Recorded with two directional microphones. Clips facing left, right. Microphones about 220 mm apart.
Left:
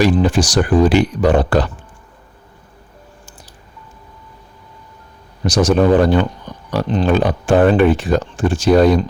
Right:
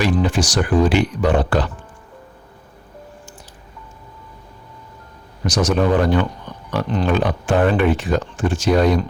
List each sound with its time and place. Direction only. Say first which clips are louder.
0.0 s speech: left 4 dB; 35° left (ahead or behind)
5.4 s speech: left 4 dB; 30° left (ahead or behind)